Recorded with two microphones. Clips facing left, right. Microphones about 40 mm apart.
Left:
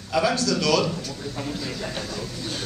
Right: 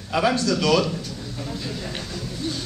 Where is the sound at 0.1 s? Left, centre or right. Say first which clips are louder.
Right 1 dB; centre.